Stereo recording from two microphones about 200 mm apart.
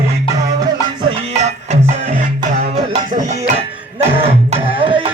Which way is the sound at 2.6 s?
30° right (ahead or behind).